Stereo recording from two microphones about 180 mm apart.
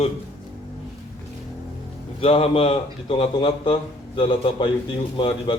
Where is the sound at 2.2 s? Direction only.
30° left (ahead or behind).